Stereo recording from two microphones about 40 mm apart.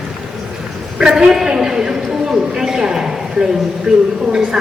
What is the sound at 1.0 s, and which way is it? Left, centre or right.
A woman's voice, centre.